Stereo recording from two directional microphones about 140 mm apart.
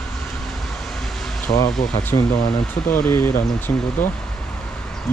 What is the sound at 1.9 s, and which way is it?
Speech, 20° left (ahead or behind).